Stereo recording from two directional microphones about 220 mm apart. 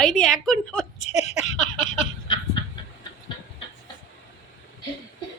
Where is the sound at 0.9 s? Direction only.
30° left (ahead or behind).